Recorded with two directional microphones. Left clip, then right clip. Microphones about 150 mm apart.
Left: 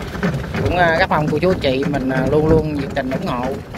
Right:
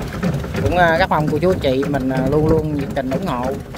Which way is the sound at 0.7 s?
20° right (ahead or behind).